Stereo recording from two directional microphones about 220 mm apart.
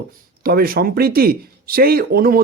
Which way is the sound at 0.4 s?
40° right (ahead or behind).